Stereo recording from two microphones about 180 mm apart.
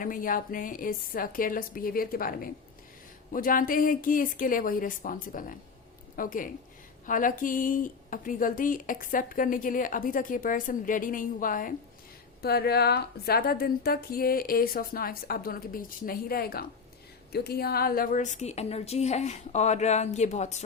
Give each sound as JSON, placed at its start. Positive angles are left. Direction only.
{"t": 0.0, "sound": "speech", "side_deg": 50}
{"t": 12.4, "sound": "a woman's voice", "side_deg": 60}